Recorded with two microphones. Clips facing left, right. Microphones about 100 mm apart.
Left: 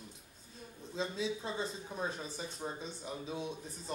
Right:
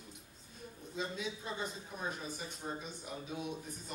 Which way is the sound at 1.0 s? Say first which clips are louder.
Left 4 dB; 30° left (ahead or behind).